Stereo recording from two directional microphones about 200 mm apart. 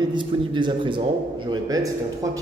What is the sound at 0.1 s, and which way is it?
A man's voice, 25° right (ahead or behind).